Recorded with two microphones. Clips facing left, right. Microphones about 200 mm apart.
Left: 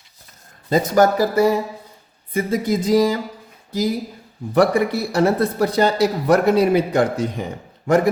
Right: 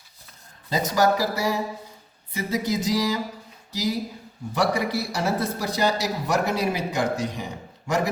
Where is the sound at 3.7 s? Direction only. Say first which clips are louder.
Left 6 dB; 50° left (ahead or behind).